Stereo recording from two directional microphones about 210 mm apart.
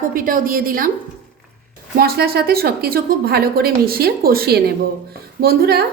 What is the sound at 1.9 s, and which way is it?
A woman's voice, 50° right (ahead or behind).